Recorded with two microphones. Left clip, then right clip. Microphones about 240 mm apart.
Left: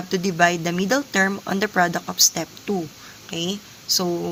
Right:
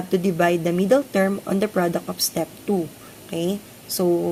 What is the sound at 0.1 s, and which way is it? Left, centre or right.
Speech, centre.